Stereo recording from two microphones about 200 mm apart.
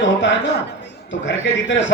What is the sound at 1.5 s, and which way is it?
Speech, 65° left (ahead or behind).